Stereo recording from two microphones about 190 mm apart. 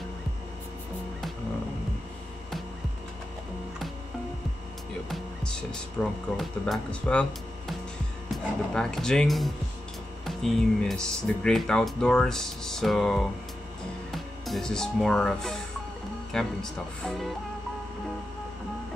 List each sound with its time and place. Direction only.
5.1 s music: 5° left (ahead or behind)
6.0 s speech: 5° left (ahead or behind)
8.7 s speech: 5° left (ahead or behind)